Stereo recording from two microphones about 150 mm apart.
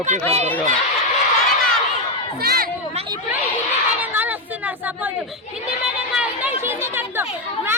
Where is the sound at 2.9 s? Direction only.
30° right (ahead or behind).